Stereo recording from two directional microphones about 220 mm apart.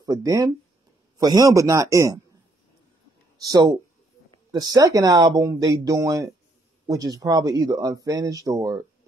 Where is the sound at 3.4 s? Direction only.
15° right (ahead or behind).